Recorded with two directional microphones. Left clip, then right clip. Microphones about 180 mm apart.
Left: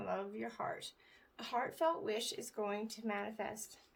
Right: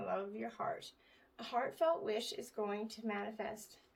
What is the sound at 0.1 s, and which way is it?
Speech, 35° left (ahead or behind).